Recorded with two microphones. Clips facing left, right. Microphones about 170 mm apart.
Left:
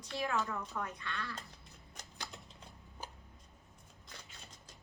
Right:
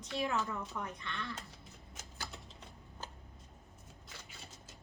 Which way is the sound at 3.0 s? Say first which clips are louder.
Even; 10° left (ahead or behind).